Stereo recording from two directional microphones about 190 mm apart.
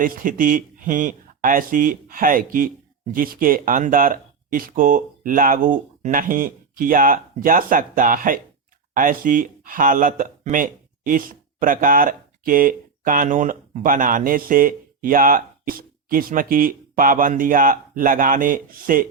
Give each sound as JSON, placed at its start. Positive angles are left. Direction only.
{"t": 0.0, "sound": "speech", "side_deg": -45}